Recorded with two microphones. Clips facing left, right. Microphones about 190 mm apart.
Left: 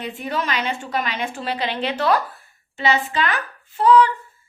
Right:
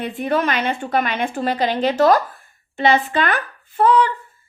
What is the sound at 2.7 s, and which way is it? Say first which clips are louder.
Speech: right 4 dB; 55° right (ahead or behind).